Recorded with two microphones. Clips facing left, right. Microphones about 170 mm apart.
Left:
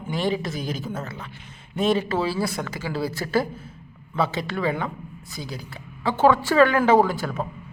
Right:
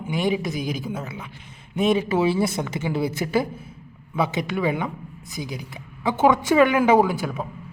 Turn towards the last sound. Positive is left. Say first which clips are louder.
# even
turn(degrees=-15)  # may be behind; listen again after turning